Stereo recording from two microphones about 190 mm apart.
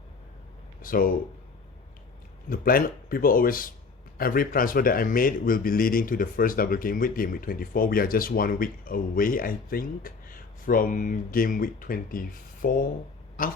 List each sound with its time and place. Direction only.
0.8 s a man's voice: 50° left (ahead or behind)
2.5 s a man's voice: 50° left (ahead or behind)